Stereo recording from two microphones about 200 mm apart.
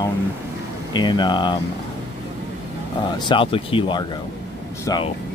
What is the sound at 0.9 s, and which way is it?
Speech, 20° left (ahead or behind).